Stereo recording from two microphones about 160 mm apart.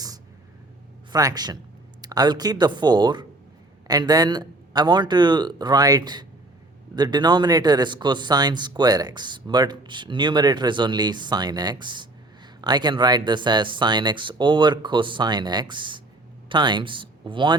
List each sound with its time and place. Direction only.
1.1 s a man's voice: 25° right (ahead or behind)